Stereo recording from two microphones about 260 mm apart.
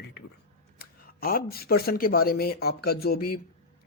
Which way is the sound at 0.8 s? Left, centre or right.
Left.